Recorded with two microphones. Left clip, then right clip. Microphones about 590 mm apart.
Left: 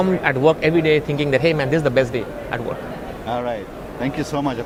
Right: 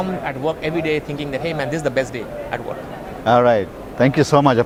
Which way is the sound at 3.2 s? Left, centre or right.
Right.